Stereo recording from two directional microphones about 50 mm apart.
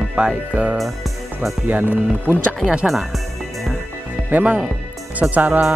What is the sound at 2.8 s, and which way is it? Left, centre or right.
Speech, centre.